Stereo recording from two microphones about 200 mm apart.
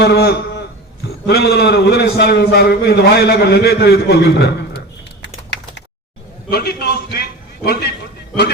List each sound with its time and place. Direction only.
0.0 s a man's voice: 50° left (ahead or behind)
6.5 s a man's voice: 50° left (ahead or behind)